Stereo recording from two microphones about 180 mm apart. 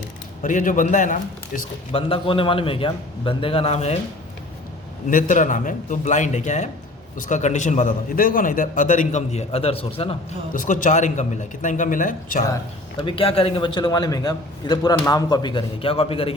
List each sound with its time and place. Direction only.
0.4 s a man's voice: 45° left (ahead or behind)
1.9 s a man's voice: 30° left (ahead or behind)
5.1 s a man's voice: 45° left (ahead or behind)
10.5 s a man's voice: 45° left (ahead or behind)
13.0 s a man's voice: 30° left (ahead or behind)